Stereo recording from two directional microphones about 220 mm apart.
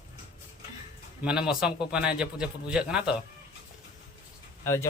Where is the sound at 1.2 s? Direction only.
5° right (ahead or behind).